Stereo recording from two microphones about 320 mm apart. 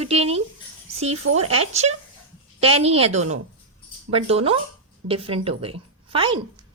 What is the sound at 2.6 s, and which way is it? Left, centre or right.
A woman's voice, centre.